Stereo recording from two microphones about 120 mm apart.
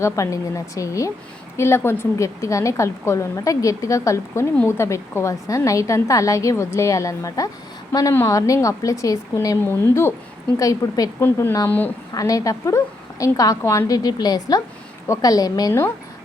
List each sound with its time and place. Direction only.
0.0 s a woman's voice: 25° left (ahead or behind)